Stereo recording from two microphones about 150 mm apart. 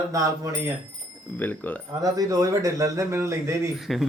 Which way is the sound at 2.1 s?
20° right (ahead or behind).